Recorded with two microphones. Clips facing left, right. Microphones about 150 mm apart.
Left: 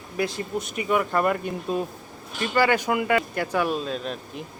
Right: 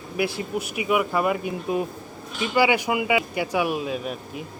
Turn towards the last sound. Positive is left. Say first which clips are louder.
# right 1 dB
turn(degrees=-5)  # may be behind; listen again after turning